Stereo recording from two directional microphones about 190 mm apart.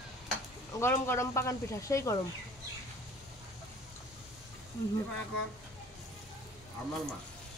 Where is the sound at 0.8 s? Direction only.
15° left (ahead or behind).